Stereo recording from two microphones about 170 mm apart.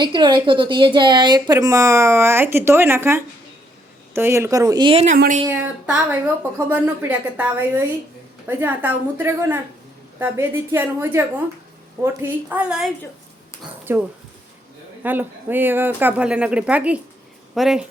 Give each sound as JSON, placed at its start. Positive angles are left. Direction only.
{"t": 0.0, "sound": "speech", "side_deg": -25}
{"t": 5.5, "sound": "a woman's voice", "side_deg": -10}
{"t": 13.9, "sound": "a woman's voice", "side_deg": -15}